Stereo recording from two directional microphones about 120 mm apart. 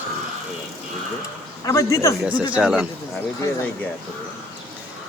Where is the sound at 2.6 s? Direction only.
5° right (ahead or behind).